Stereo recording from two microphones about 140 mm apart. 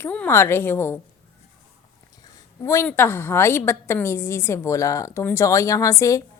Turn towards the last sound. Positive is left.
turn(degrees=20)  # may be behind; listen again after turning